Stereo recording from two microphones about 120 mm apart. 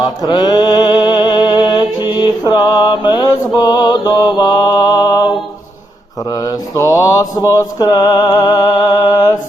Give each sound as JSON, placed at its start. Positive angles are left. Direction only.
{"t": 0.3, "sound": "music", "side_deg": 35}
{"t": 6.3, "sound": "mantra", "side_deg": 30}